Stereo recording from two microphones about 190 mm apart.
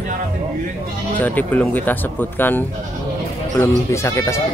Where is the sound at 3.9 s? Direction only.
15° left (ahead or behind).